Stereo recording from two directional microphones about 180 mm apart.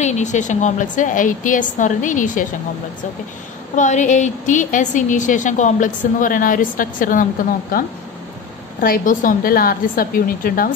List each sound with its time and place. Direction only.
0.0 s a woman's voice: 40° left (ahead or behind)
3.7 s a woman's voice: 45° left (ahead or behind)
8.8 s a woman's voice: 50° left (ahead or behind)